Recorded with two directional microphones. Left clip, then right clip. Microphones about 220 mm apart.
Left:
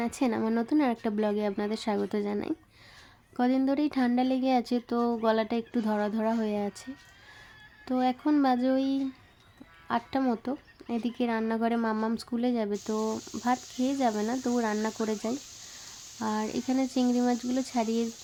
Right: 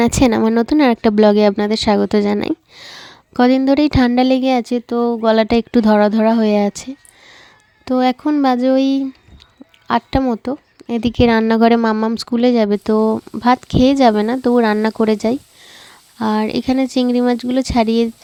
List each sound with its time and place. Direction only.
0.0 s speech: 45° right (ahead or behind)